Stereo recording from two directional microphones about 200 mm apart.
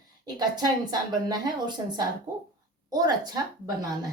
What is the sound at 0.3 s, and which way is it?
A woman's voice, 20° right (ahead or behind).